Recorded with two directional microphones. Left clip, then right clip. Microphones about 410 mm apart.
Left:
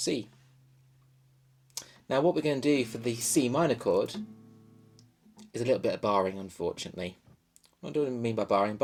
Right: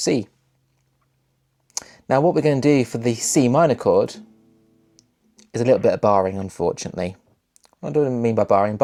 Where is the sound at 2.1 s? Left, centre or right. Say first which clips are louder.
Right 9 dB; right.